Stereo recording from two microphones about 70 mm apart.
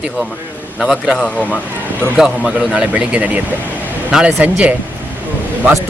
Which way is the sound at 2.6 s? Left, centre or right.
Centre.